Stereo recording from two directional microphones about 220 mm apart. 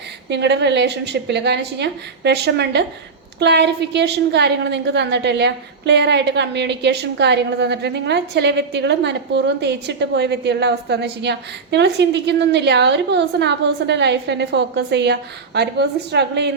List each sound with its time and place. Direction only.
0.3 s a woman's voice: 50° right (ahead or behind)